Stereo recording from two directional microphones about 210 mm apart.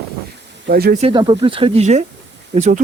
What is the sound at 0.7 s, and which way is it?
Speech, 50° right (ahead or behind).